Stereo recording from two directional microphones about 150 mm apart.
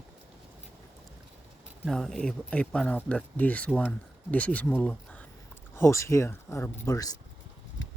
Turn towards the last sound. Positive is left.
turn(degrees=25)  # may be behind; listen again after turning